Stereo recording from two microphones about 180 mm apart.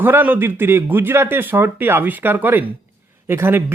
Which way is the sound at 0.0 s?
10° right (ahead or behind).